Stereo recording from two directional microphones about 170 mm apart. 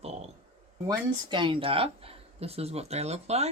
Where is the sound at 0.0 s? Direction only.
40° right (ahead or behind).